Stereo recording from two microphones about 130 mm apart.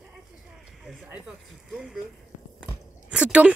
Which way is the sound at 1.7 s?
Centre (ahead or behind).